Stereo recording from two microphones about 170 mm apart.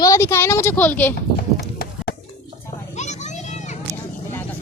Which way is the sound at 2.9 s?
45° left (ahead or behind).